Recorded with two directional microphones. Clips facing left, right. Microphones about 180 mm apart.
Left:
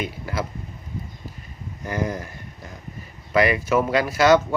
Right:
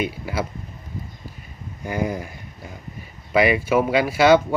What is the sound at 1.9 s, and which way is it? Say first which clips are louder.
Speech: right 1 dB; 20° right (ahead or behind).